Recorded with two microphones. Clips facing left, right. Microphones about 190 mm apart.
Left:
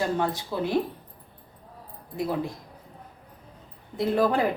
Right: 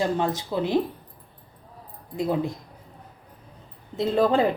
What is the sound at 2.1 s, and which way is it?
Speech, 20° right (ahead or behind).